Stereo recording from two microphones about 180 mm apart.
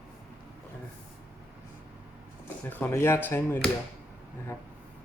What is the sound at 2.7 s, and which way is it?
Speech, 10° left (ahead or behind).